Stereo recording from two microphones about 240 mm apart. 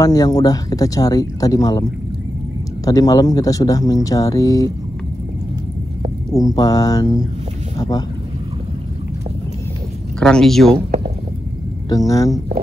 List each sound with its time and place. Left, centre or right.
0.0 s speech: centre
6.3 s speech: centre
10.2 s speech: centre
11.9 s speech: centre